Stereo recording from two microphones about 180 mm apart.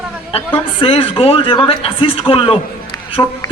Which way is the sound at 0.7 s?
30° left (ahead or behind).